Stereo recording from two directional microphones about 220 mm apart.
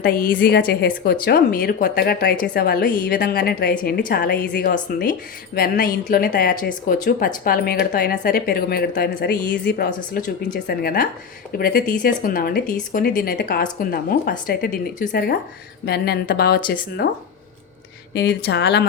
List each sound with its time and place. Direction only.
0.0 s a woman's voice: 40° left (ahead or behind)